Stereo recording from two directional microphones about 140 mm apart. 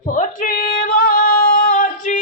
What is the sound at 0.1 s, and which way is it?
Female singing, 70° left (ahead or behind).